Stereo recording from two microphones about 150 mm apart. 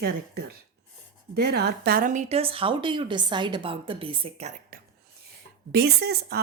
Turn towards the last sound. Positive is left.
turn(degrees=-90)